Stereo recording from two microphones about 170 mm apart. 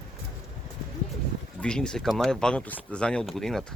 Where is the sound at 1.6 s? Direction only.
5° left (ahead or behind).